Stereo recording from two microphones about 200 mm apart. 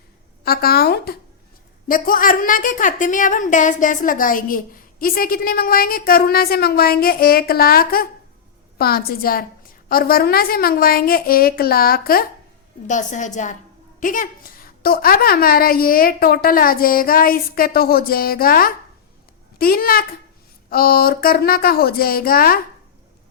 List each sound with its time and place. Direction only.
0.4 s a woman's voice: 50° left (ahead or behind)